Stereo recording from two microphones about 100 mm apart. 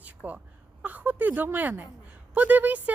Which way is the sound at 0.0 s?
15° right (ahead or behind).